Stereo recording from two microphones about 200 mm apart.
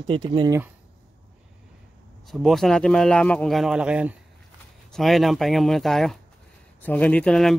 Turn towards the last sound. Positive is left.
turn(degrees=5)  # may be behind; listen again after turning